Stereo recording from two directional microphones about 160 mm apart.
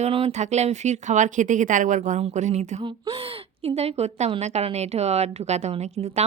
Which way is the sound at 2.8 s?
30° right (ahead or behind).